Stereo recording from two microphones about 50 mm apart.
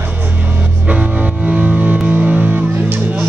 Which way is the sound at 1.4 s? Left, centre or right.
Right.